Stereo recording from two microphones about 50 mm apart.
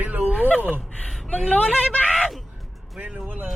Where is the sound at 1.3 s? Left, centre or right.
Left.